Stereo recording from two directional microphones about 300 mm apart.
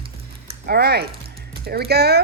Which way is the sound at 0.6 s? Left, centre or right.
Right.